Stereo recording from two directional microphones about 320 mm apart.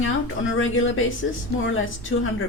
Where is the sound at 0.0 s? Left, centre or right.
Left.